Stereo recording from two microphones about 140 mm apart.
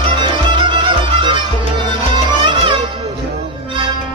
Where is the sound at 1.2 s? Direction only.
35° right (ahead or behind).